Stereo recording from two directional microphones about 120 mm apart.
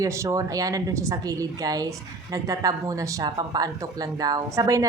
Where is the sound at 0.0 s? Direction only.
25° right (ahead or behind).